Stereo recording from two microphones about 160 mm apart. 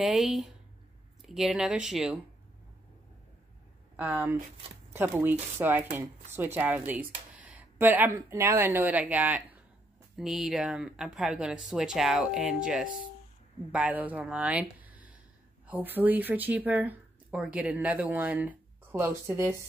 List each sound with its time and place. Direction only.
0.0 s speech: centre (ahead or behind)
3.9 s speech: 10° right (ahead or behind)